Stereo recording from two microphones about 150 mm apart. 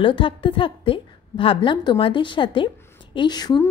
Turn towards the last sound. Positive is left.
turn(degrees=30)  # may be behind; listen again after turning